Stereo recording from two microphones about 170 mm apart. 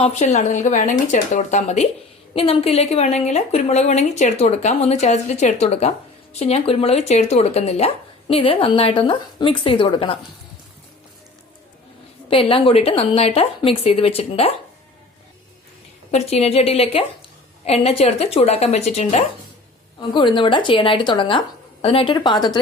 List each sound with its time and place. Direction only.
0.0 s speech: 40° left (ahead or behind)
12.3 s speech: 30° left (ahead or behind)
16.1 s speech: 40° left (ahead or behind)
20.0 s speech: 30° left (ahead or behind)